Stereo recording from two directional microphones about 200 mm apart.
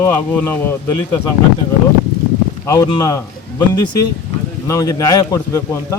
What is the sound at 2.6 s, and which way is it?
A man's voice, 15° left (ahead or behind).